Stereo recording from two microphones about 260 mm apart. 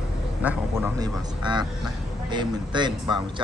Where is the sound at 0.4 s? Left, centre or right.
Centre.